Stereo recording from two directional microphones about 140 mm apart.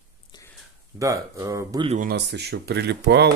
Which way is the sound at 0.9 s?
20° right (ahead or behind).